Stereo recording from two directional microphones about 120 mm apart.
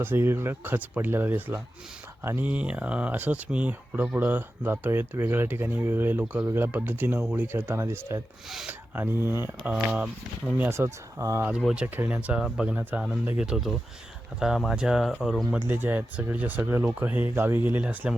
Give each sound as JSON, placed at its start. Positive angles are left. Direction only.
{"t": 0.0, "sound": "speech", "side_deg": -20}
{"t": 8.4, "sound": "speech", "side_deg": 0}
{"t": 9.0, "sound": "speech", "side_deg": -20}
{"t": 9.7, "sound": "speech", "side_deg": -10}
{"t": 10.7, "sound": "speech", "side_deg": -25}
{"t": 11.7, "sound": "speech", "side_deg": -10}
{"t": 15.5, "sound": "speech", "side_deg": -20}